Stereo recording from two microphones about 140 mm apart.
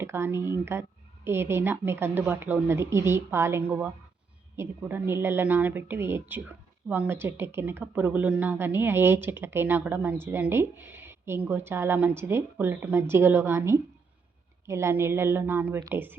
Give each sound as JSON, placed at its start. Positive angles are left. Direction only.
{"t": 0.0, "sound": "speech", "side_deg": -15}